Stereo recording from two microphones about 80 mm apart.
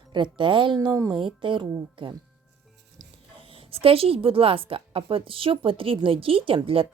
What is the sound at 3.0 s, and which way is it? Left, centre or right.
Music, right.